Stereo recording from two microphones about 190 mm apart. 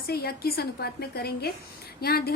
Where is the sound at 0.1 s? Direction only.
55° left (ahead or behind).